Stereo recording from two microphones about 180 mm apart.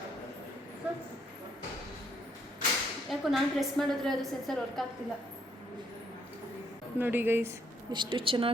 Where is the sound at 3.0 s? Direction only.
Centre (ahead or behind).